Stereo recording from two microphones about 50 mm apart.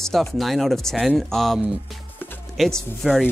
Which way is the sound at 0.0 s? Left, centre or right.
Centre.